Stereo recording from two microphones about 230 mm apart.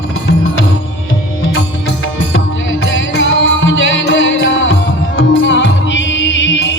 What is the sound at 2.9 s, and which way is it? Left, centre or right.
Music, left.